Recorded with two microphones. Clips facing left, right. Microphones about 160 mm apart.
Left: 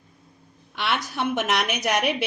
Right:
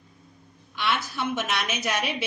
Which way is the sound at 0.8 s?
65° left (ahead or behind).